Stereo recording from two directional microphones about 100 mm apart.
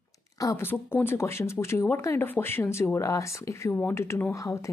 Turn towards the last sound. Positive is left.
turn(degrees=30)  # may be behind; listen again after turning